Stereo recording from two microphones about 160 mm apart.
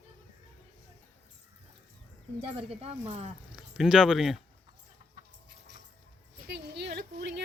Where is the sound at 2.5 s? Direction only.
40° right (ahead or behind).